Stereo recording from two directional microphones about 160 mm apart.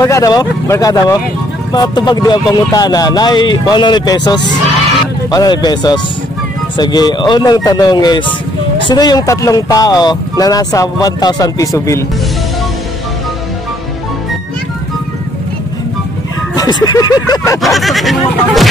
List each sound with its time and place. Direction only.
0.0 s speech: 20° left (ahead or behind)
16.5 s speech: 25° left (ahead or behind)
17.6 s speech: centre (ahead or behind)